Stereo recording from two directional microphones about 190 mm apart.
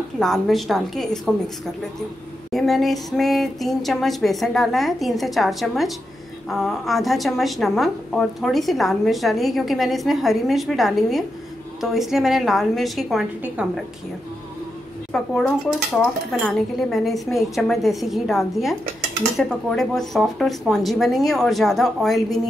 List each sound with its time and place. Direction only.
0.2 s a woman's voice: centre (ahead or behind)
2.5 s a woman's voice: centre (ahead or behind)
15.1 s a woman's voice: centre (ahead or behind)